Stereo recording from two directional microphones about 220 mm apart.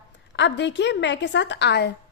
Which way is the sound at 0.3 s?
55° left (ahead or behind).